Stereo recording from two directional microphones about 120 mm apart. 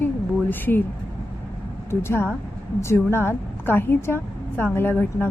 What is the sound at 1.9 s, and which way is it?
A woman's voice, 20° left (ahead or behind).